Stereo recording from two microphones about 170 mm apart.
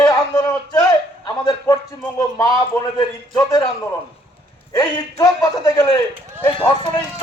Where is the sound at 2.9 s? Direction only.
25° left (ahead or behind).